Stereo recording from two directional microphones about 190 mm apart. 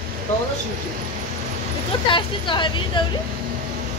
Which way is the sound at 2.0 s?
25° left (ahead or behind).